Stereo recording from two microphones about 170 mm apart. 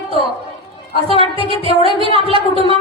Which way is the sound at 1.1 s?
30° right (ahead or behind).